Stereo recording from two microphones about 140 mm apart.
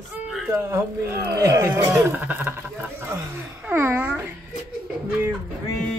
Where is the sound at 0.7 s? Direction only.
20° right (ahead or behind).